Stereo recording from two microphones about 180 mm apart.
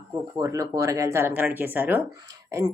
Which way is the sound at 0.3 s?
15° right (ahead or behind).